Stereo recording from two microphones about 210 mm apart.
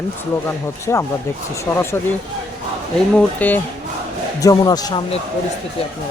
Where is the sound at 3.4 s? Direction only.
10° left (ahead or behind).